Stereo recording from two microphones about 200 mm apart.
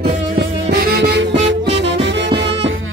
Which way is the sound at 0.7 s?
55° right (ahead or behind).